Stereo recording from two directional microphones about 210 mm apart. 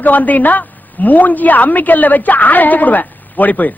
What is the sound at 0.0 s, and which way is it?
A woman's voice, 10° left (ahead or behind).